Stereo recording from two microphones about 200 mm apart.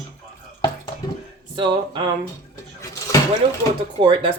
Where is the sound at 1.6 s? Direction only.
25° right (ahead or behind).